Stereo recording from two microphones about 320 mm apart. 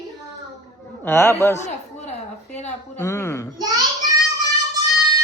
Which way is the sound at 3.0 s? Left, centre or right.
Centre.